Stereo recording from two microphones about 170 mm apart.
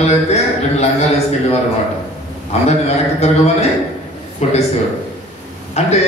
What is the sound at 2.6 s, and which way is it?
A man's voice, 40° left (ahead or behind).